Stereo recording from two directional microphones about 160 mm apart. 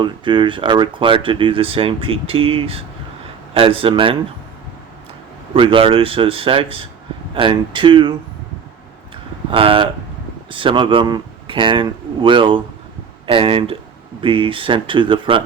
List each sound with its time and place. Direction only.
0.0 s speech: 30° right (ahead or behind)
5.5 s speech: 35° right (ahead or behind)
9.5 s speech: 35° right (ahead or behind)